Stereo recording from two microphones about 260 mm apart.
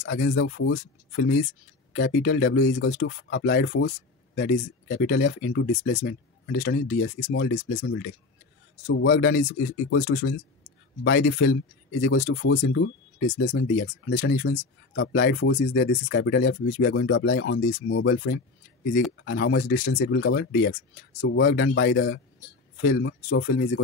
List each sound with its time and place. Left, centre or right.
0.0 s speech: left